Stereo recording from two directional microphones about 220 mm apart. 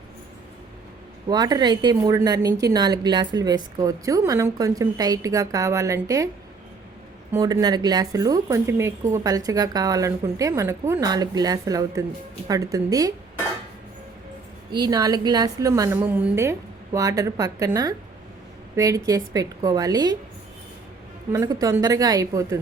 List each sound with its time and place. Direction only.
1.3 s a woman's voice: 20° right (ahead or behind)
7.3 s a woman's voice: 15° right (ahead or behind)
14.7 s a woman's voice: 20° right (ahead or behind)
21.3 s a woman's voice: 15° right (ahead or behind)